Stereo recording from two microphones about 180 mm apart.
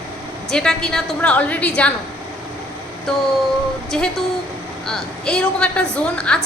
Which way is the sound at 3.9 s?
Centre (ahead or behind).